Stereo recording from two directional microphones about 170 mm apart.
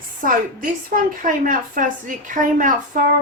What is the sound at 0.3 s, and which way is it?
A woman's voice, 55° right (ahead or behind).